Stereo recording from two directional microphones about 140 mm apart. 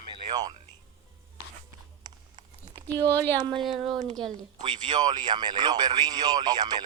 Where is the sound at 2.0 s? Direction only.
35° right (ahead or behind).